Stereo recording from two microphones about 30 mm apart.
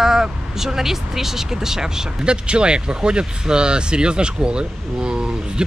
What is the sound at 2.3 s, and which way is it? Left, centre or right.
Speech, right.